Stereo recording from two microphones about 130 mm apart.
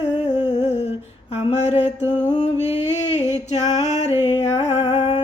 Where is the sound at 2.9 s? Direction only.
60° left (ahead or behind).